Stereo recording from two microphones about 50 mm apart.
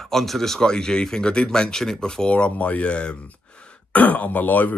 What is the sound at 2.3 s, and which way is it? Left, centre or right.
Speech, left.